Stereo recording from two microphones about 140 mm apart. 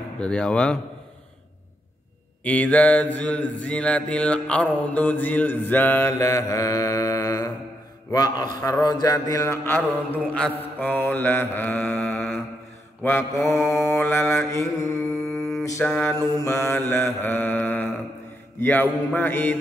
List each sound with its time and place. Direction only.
0.2 s mantra: 5° left (ahead or behind)
2.4 s mantra: 10° left (ahead or behind)
13.0 s mantra: 20° left (ahead or behind)
15.8 s mantra: 10° left (ahead or behind)
16.2 s mantra: 20° left (ahead or behind)